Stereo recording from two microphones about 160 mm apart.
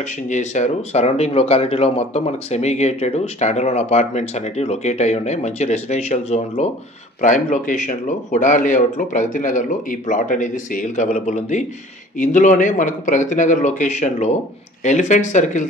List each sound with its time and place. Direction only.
0.3 s speech: 50° left (ahead or behind)